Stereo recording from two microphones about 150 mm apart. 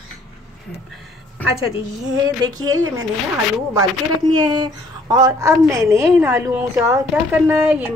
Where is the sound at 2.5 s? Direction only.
25° right (ahead or behind).